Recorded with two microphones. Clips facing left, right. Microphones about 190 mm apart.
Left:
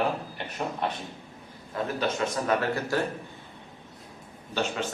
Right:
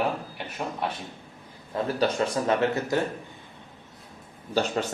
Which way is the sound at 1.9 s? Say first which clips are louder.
Right 4 dB; 30° right (ahead or behind).